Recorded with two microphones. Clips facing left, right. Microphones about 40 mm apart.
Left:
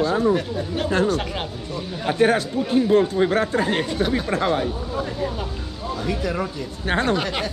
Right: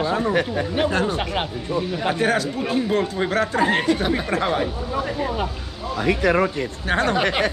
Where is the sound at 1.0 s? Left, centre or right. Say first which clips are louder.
Even; right.